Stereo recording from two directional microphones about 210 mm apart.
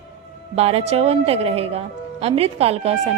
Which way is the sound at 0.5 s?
30° right (ahead or behind).